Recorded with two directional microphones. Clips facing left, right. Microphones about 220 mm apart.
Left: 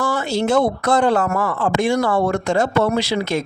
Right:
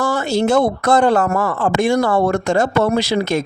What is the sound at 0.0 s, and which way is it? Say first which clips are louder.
Speech: right 3 dB; 45° right (ahead or behind).